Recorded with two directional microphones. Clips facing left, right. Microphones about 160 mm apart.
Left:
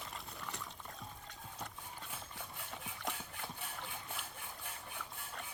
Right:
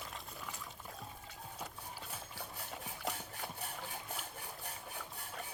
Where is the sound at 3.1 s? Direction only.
40° right (ahead or behind).